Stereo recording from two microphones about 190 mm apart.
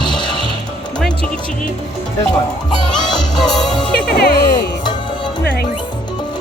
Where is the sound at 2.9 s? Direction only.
20° left (ahead or behind).